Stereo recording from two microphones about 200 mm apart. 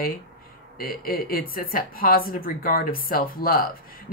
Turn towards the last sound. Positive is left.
turn(degrees=45)  # may be behind; listen again after turning